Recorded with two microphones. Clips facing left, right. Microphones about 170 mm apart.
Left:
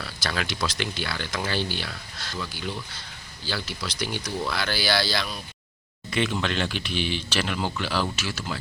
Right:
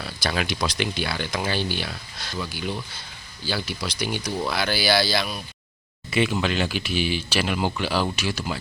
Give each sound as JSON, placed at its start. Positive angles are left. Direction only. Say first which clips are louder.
{"t": 0.0, "sound": "speech", "louder": "right 3 dB", "side_deg": -15}